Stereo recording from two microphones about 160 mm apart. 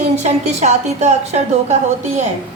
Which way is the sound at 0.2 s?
45° right (ahead or behind).